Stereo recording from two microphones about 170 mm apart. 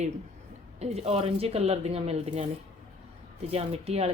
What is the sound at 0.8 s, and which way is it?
A woman's voice, 40° right (ahead or behind).